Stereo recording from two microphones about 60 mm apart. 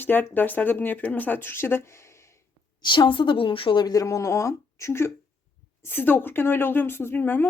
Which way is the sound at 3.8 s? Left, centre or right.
Left.